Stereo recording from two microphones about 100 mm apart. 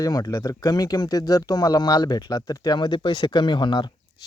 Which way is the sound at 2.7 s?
50° left (ahead or behind).